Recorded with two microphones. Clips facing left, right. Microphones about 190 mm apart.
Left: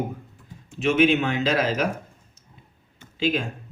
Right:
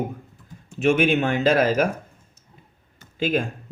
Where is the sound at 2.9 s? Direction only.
50° right (ahead or behind).